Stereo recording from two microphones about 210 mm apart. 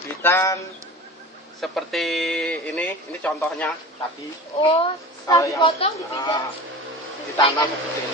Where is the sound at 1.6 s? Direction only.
Centre (ahead or behind).